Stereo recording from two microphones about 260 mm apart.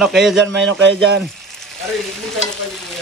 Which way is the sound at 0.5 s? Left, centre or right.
Right.